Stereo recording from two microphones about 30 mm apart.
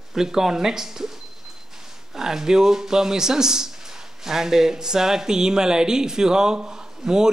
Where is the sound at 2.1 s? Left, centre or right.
Centre.